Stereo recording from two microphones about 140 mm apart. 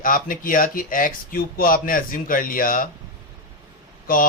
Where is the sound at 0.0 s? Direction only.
80° left.